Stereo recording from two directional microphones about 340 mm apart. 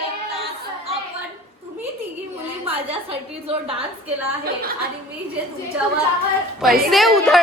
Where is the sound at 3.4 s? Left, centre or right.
Centre.